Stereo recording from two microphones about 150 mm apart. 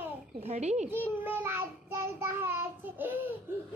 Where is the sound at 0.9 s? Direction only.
15° right (ahead or behind).